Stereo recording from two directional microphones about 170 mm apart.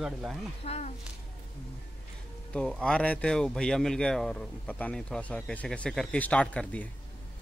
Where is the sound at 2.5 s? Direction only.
5° left (ahead or behind).